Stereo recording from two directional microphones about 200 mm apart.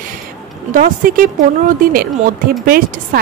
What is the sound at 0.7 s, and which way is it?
A woman's voice, 40° right (ahead or behind).